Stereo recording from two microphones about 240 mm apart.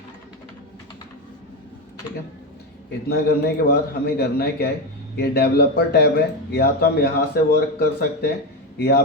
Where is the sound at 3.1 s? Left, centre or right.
Left.